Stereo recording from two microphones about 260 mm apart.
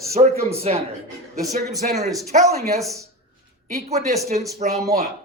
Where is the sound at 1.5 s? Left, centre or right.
Right.